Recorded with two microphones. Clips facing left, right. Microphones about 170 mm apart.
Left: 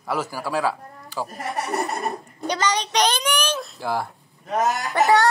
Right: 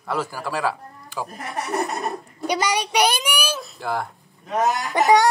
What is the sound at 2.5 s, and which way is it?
A child's voice, 10° right (ahead or behind).